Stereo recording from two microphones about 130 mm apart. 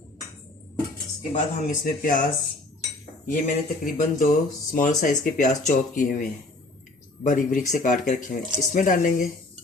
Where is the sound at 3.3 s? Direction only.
80° left.